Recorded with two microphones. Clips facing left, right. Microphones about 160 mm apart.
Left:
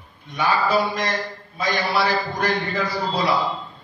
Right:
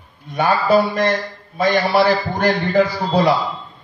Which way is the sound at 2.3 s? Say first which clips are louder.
Right 8 dB; 65° right (ahead or behind).